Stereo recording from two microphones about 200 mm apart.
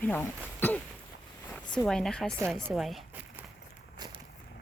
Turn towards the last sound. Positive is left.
turn(degrees=-20)  # may be behind; listen again after turning